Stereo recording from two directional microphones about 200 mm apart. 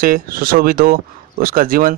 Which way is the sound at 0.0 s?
45° right (ahead or behind).